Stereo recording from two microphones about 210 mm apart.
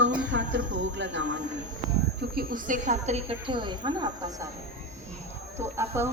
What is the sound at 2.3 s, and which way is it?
A woman's voice, 45° right (ahead or behind).